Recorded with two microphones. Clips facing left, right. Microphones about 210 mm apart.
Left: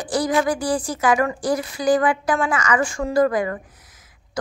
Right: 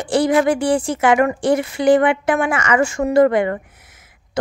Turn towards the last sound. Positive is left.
turn(degrees=-25)  # may be behind; listen again after turning